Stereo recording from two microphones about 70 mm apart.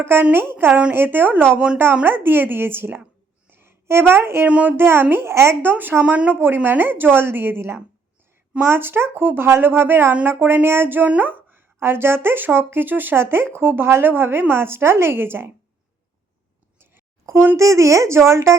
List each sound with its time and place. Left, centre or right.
0.0 s a woman's voice: right
1.5 s speech: centre
2.0 s speech: right
3.5 s a sound: right
4.4 s a woman's voice: centre
4.8 s speech: right
5.6 s a woman's voice: right
16.7 s a sound: right
17.6 s a woman's voice: right